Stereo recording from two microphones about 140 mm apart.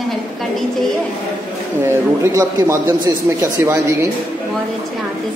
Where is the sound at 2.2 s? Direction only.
20° right (ahead or behind).